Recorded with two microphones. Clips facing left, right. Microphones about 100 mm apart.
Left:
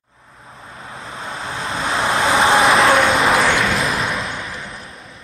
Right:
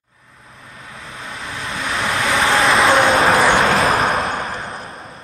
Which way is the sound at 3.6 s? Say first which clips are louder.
Right 4 dB; 90° right.